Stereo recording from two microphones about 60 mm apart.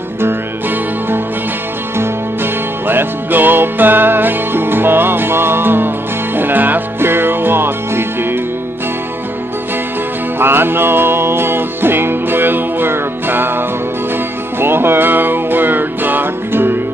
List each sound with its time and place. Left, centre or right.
0.2 s music: right
10.4 s music: right